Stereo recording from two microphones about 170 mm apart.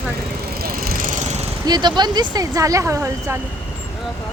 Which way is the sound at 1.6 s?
25° right (ahead or behind).